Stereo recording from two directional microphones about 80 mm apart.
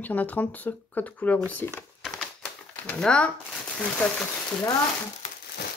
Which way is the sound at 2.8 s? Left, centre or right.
Centre.